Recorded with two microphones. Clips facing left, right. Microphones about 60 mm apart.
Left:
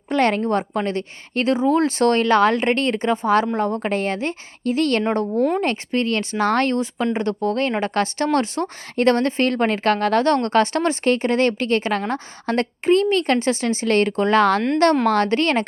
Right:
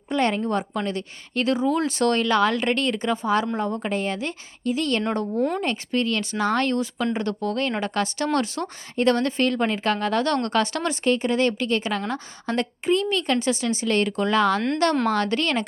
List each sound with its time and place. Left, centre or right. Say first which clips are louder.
0.1 s a woman's voice: left 4 dB; left
0.4 s speech: left 4 dB; left
3.3 s a woman's voice: left 4 dB; left
4.6 s a woman's voice: left 4 dB; left
5.7 s speech: left 3 dB; left
6.7 s a woman's voice: left 3 dB; left
10.2 s speech: left 5 dB; left
11.0 s a woman's voice: left 1 dB; left